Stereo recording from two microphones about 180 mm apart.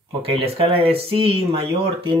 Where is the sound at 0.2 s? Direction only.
30° right (ahead or behind).